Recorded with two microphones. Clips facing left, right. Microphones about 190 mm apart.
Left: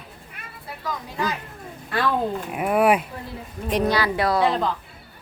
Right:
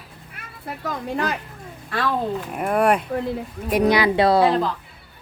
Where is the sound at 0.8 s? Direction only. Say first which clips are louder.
Right 3 dB; 60° right (ahead or behind).